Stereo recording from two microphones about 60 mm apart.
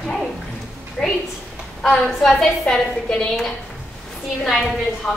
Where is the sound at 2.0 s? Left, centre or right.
Centre.